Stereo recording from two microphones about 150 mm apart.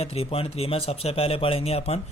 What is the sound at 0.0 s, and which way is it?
Speech, 40° left (ahead or behind).